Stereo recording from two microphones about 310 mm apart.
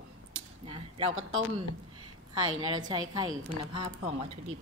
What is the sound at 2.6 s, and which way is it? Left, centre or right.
A woman's voice, centre.